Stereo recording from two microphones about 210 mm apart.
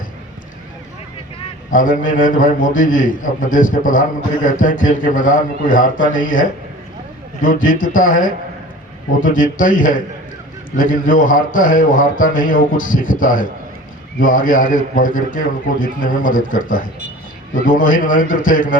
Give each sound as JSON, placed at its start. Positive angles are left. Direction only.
{"t": 1.7, "sound": "a man's voice", "side_deg": 40}